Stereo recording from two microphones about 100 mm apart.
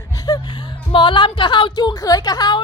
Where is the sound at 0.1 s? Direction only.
40° left (ahead or behind).